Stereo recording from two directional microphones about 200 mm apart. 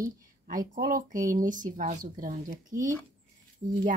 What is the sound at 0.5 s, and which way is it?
A woman's voice, 45° right (ahead or behind).